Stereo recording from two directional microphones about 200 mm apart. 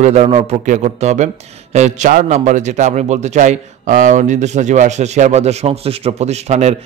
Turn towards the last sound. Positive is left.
turn(degrees=-35)  # may be behind; listen again after turning